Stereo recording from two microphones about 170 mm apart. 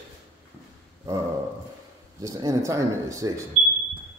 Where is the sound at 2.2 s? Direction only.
20° right (ahead or behind).